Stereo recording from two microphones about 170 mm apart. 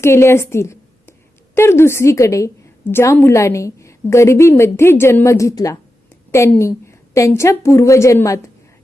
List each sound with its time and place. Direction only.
0.0 s a woman's voice: 15° left (ahead or behind)